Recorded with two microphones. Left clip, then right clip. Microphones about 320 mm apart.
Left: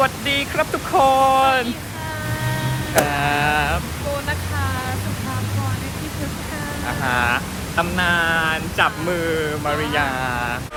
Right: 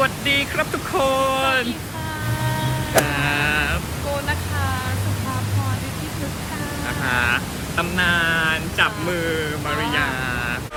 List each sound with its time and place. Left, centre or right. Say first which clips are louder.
0.0 s speech: even; centre
2.9 s a sound: left 1 dB; centre
7.0 s speech: left 1 dB; centre